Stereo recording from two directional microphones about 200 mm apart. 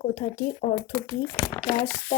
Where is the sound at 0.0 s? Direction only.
40° left (ahead or behind).